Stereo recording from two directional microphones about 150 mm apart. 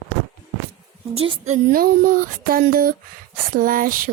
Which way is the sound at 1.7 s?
70° right (ahead or behind).